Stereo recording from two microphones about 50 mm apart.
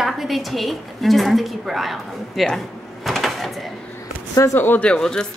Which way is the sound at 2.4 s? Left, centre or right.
Centre.